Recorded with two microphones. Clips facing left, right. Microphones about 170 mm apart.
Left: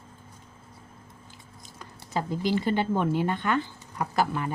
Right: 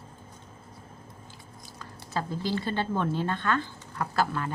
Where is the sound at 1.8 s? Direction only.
15° left (ahead or behind).